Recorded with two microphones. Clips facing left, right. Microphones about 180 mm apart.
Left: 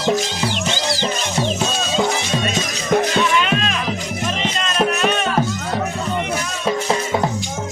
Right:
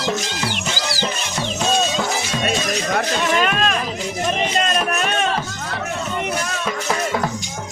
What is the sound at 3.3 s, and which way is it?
Music, 45° right (ahead or behind).